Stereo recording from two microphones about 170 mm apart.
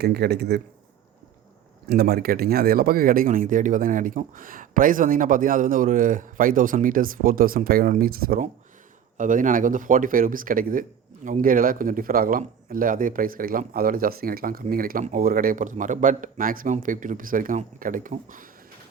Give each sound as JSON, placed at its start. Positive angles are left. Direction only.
{"t": 0.0, "sound": "speech", "side_deg": -75}
{"t": 1.9, "sound": "a man's voice", "side_deg": -65}